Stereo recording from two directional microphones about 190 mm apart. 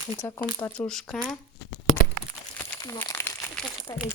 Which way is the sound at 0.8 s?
5° left (ahead or behind).